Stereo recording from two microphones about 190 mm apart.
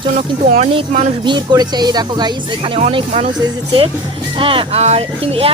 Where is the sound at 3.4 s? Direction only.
25° right (ahead or behind).